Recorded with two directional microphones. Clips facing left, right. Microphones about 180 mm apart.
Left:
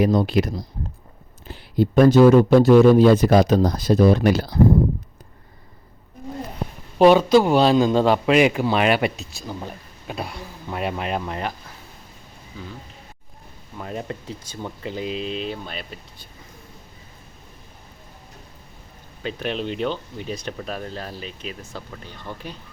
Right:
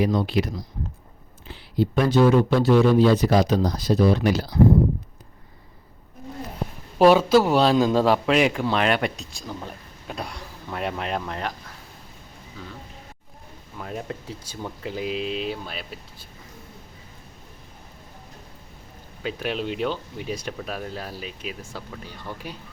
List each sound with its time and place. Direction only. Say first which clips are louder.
0.0 s speech: left 4 dB; 45° left (ahead or behind)
7.0 s a man's voice: left 2 dB; 5° right (ahead or behind)
13.7 s a man's voice: left 2 dB; centre (ahead or behind)
19.2 s speech: left 1 dB; 5° right (ahead or behind)